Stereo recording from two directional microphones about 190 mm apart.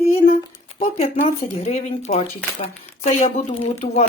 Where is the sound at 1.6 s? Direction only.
35° left (ahead or behind).